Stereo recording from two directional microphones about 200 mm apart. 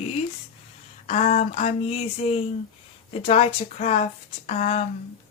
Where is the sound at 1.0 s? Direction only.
35° left (ahead or behind).